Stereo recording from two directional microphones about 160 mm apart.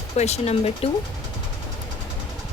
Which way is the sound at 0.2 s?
40° left (ahead or behind).